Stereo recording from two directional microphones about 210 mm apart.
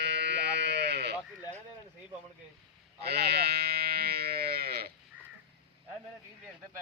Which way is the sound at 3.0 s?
50° right (ahead or behind).